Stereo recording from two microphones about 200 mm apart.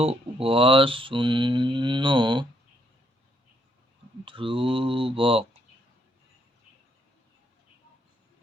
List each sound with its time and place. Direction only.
0.0 s mantra: 30° right (ahead or behind)
4.3 s mantra: 25° right (ahead or behind)